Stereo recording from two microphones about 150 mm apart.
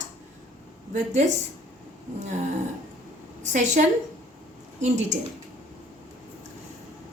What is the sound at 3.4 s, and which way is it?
A woman's voice, 55° right (ahead or behind).